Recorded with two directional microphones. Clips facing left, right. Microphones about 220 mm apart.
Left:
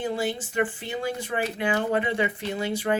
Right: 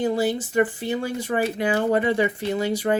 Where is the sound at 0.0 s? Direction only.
40° right (ahead or behind).